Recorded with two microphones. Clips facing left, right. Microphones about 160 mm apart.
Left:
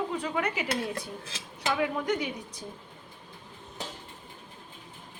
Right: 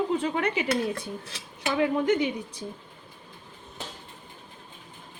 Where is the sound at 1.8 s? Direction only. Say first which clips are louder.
Right 8 dB; 25° right (ahead or behind).